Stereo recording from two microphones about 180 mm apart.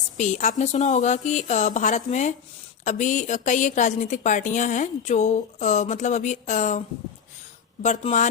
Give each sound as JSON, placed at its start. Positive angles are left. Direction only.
{"t": 0.2, "sound": "a woman's voice", "side_deg": 40}